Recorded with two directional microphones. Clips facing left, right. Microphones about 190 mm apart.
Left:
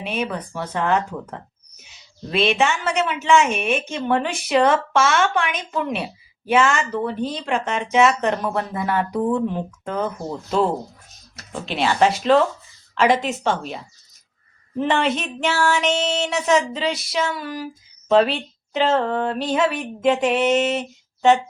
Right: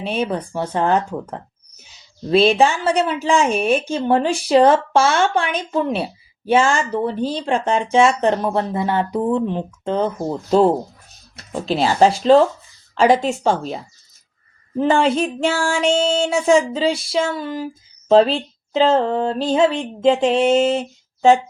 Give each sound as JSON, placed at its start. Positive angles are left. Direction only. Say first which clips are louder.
{"t": 0.0, "sound": "a woman's voice", "louder": "right 4 dB", "side_deg": -30}
{"t": 14.8, "sound": "speech", "louder": "right 5 dB", "side_deg": -30}